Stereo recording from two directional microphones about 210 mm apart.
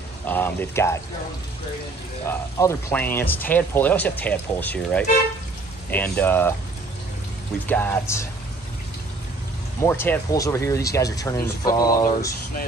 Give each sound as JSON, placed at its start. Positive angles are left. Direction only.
{"t": 0.3, "sound": "speech", "side_deg": 10}
{"t": 2.2, "sound": "speech", "side_deg": 10}
{"t": 7.6, "sound": "speech", "side_deg": 10}
{"t": 9.8, "sound": "speech", "side_deg": 10}